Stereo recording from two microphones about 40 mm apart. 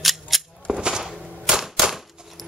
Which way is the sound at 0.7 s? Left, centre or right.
Centre.